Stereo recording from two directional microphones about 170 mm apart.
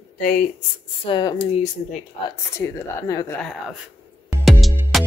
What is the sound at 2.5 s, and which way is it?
Speech, 20° left (ahead or behind).